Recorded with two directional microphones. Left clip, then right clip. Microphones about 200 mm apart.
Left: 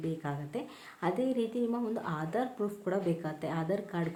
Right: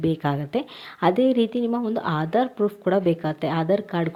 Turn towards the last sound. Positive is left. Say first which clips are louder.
# right 11 dB
turn(degrees=-35)  # may be behind; listen again after turning